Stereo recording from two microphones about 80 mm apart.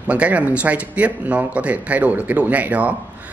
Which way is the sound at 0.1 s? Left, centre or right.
Centre.